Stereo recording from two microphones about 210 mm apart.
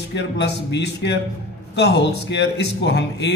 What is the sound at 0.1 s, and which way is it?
A man's voice, 55° left (ahead or behind).